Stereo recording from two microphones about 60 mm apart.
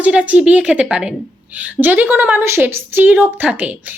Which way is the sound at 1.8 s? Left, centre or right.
Right.